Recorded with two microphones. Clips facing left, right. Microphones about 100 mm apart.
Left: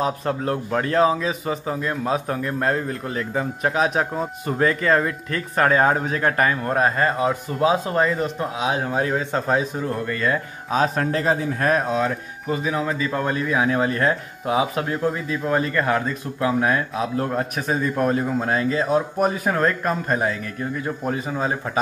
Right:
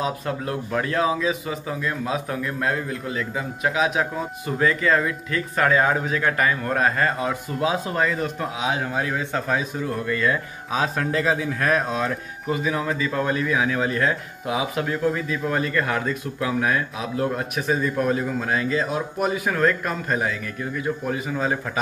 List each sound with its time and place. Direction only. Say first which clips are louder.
0.2 s speech: left 3 dB; 40° left (ahead or behind)
6.7 s speech: left 2 dB; 25° left (ahead or behind)